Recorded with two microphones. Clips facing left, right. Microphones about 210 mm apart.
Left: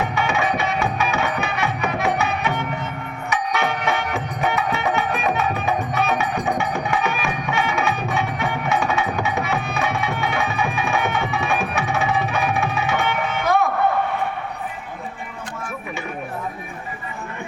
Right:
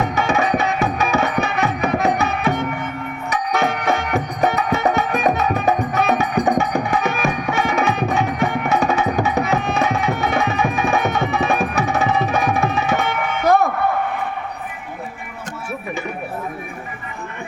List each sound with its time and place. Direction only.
0.1 s music: 40° right (ahead or behind)